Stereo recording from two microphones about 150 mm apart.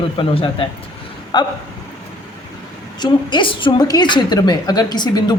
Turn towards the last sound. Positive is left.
turn(degrees=30)  # may be behind; listen again after turning